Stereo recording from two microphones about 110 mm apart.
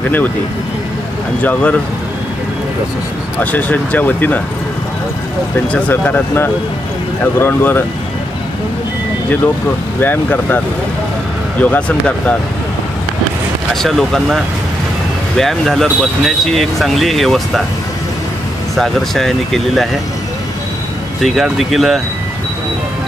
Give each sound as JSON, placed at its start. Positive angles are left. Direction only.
{"t": 1.4, "sound": "speech", "side_deg": 15}
{"t": 3.3, "sound": "speech", "side_deg": 15}
{"t": 5.7, "sound": "speech", "side_deg": 15}
{"t": 9.9, "sound": "speech", "side_deg": 15}
{"t": 11.6, "sound": "speech", "side_deg": 15}
{"t": 13.8, "sound": "speech", "side_deg": 5}
{"t": 18.8, "sound": "speech", "side_deg": 0}
{"t": 21.2, "sound": "speech", "side_deg": 0}